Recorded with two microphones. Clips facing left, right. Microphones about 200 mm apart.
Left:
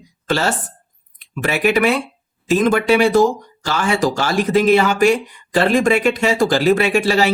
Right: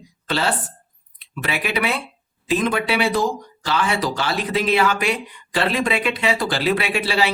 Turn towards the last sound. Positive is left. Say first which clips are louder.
# left 6 dB
turn(degrees=45)  # may be behind; listen again after turning